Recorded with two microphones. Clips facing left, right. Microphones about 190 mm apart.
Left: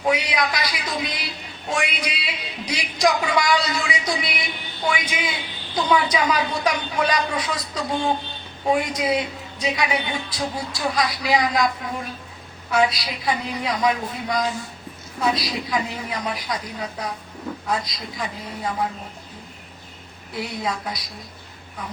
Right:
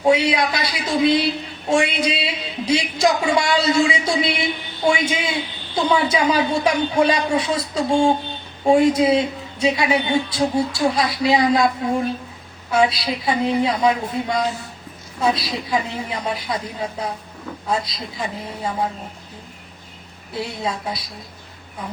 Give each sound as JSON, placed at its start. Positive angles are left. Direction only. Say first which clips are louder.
{"t": 0.0, "sound": "a woman's voice", "louder": "right 5 dB", "side_deg": -25}
{"t": 12.7, "sound": "a woman's voice", "louder": "right 3 dB", "side_deg": -25}
{"t": 20.3, "sound": "a woman's voice", "louder": "right 2 dB", "side_deg": -25}